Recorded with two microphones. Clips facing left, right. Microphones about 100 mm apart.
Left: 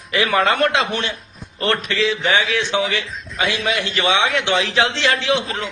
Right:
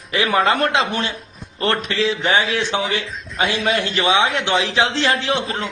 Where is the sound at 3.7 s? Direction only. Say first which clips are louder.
Right 1 dB; 45° right (ahead or behind).